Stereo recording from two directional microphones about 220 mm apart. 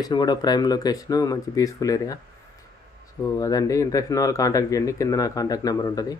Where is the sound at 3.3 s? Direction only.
15° left (ahead or behind).